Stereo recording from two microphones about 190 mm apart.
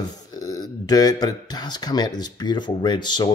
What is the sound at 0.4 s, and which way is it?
Speech, 20° left (ahead or behind).